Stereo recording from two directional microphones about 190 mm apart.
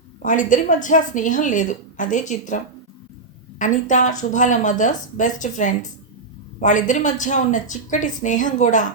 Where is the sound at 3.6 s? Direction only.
40° left (ahead or behind).